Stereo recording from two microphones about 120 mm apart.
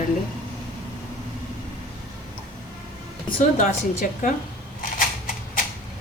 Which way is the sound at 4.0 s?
90° left.